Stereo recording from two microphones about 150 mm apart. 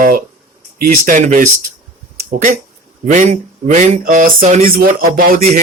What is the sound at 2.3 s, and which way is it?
Speech, 70° right (ahead or behind).